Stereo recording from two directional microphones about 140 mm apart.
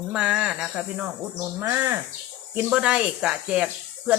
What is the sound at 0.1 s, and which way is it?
Speech, 5° right (ahead or behind).